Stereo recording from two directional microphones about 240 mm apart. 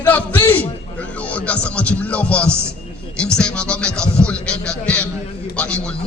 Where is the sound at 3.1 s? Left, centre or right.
Centre.